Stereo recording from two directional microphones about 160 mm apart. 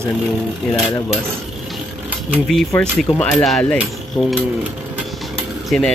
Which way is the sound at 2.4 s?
5° left (ahead or behind).